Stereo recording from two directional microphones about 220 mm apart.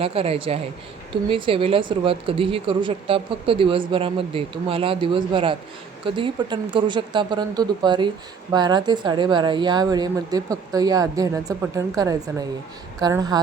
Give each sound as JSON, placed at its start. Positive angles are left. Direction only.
{"t": 0.0, "sound": "a woman's voice", "side_deg": -25}